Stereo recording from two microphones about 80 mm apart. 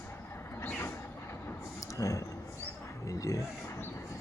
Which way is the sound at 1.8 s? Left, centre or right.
Left.